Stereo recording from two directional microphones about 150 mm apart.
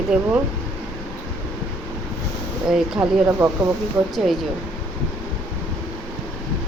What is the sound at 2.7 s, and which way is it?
Speech, 10° right (ahead or behind).